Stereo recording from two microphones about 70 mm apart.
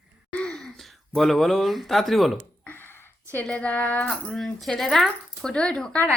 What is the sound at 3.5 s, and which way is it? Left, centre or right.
Speech, centre.